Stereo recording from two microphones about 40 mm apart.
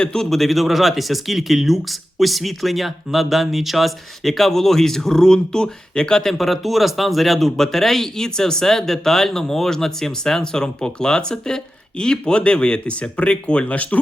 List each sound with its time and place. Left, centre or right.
0.0 s speech: centre
0.3 s speech: centre; by 6.2 s left
6.2 s speech: centre; by 14.0 s left